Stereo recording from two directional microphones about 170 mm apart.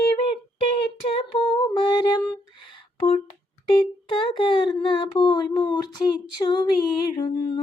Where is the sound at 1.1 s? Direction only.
35° left (ahead or behind).